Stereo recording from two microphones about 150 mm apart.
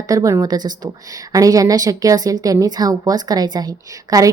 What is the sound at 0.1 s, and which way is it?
Speech, 20° right (ahead or behind).